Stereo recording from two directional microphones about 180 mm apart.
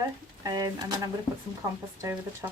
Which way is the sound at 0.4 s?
20° right (ahead or behind).